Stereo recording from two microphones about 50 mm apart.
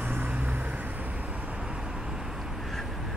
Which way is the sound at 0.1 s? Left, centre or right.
Right.